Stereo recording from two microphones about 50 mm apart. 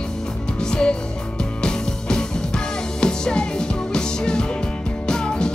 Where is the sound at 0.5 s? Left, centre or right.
Centre.